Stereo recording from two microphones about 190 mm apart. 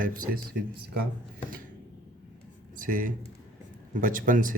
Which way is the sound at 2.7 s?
45° right (ahead or behind).